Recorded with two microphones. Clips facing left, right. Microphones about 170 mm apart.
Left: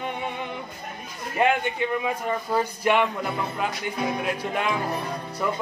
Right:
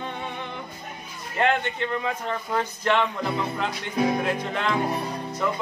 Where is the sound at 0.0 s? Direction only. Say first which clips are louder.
Left 2 dB; 15° left (ahead or behind).